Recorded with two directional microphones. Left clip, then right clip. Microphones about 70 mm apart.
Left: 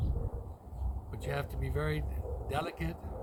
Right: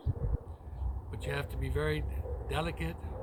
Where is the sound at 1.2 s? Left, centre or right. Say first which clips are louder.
Even; left.